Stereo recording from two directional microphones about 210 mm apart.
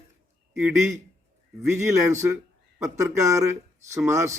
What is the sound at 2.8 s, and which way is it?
A man's voice, 15° right (ahead or behind).